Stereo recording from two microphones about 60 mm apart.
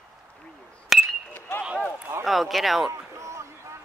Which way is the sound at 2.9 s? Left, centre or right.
Right.